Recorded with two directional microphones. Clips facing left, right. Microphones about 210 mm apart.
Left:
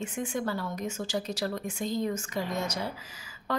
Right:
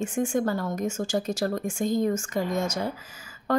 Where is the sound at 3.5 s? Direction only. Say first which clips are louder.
Right 7 dB; 50° right (ahead or behind).